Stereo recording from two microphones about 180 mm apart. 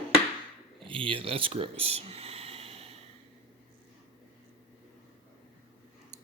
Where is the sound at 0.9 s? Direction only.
30° right (ahead or behind).